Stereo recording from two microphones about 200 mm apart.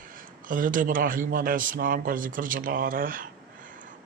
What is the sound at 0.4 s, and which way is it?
Speech, 45° right (ahead or behind).